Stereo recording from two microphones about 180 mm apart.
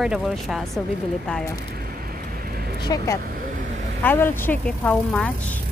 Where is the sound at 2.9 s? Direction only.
20° left (ahead or behind).